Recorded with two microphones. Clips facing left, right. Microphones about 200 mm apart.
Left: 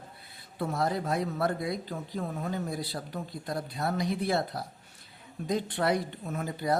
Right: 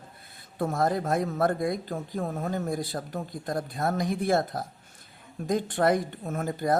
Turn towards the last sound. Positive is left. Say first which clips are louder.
# right 3 dB
turn(degrees=-50)  # may be behind; listen again after turning